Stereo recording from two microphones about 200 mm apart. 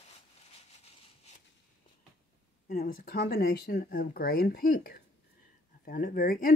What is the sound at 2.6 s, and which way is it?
Speech, 45° left (ahead or behind).